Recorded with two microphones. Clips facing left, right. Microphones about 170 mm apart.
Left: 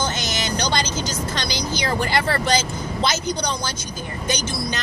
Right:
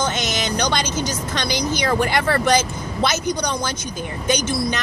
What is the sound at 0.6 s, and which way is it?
Speech, 55° right (ahead or behind).